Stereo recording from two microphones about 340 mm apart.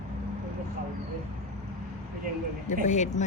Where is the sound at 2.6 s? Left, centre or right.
Left.